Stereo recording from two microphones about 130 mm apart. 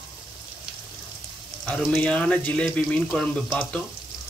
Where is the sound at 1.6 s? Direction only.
10° left (ahead or behind).